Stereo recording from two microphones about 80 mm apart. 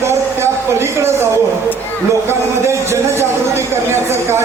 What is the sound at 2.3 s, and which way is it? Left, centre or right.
Speech, right.